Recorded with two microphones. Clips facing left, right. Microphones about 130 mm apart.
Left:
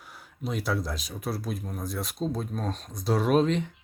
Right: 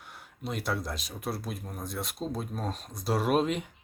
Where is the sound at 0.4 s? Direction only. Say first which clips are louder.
Left 3 dB; centre (ahead or behind).